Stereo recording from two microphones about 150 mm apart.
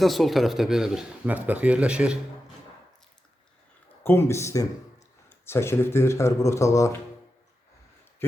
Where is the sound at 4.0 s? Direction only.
15° left (ahead or behind).